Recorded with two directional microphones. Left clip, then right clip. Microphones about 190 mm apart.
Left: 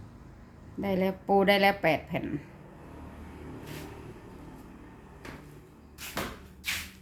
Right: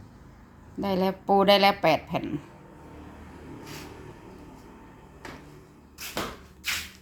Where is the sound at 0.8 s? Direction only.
20° right (ahead or behind).